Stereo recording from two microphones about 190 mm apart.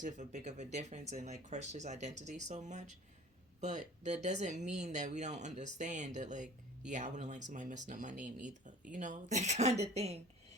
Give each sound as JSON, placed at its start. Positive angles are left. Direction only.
{"t": 0.0, "sound": "speech", "side_deg": -40}